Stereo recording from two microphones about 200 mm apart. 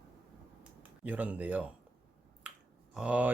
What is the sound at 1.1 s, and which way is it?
Speech, 5° right (ahead or behind).